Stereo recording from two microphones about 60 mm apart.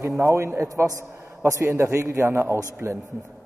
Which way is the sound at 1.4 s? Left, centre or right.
Right.